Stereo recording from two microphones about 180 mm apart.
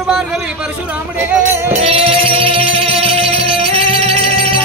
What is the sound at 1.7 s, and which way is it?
Music, 35° right (ahead or behind).